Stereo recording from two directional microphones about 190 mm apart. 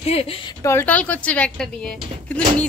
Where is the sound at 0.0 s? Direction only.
30° left (ahead or behind).